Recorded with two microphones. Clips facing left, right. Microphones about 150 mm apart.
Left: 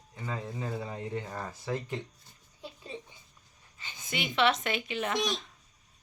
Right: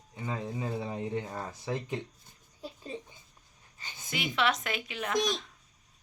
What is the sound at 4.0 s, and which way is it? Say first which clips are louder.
Speech: left 2 dB; centre (ahead or behind).